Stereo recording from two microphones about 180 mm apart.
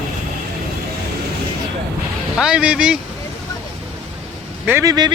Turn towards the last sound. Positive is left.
turn(degrees=-20)  # may be behind; listen again after turning